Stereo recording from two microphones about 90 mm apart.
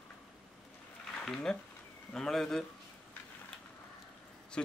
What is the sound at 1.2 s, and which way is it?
A man's voice, 10° left (ahead or behind).